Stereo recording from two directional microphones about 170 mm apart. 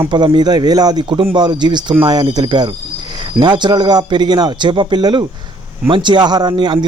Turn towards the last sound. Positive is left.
turn(degrees=-25)  # may be behind; listen again after turning